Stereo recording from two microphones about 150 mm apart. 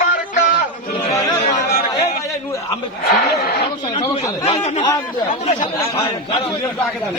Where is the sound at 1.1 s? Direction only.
25° left (ahead or behind).